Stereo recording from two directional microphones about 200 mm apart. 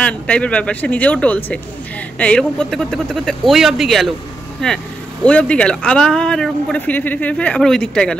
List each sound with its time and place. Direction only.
0.0 s speech: 5° left (ahead or behind)